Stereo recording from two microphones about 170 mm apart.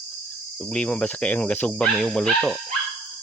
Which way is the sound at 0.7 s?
5° left (ahead or behind).